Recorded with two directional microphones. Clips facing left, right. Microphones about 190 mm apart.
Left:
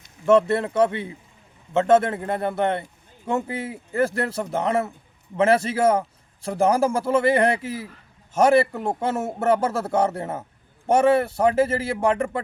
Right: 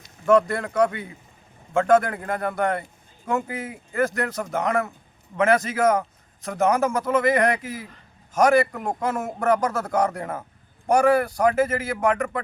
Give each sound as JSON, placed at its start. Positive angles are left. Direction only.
{"t": 0.3, "sound": "a man's voice", "side_deg": 25}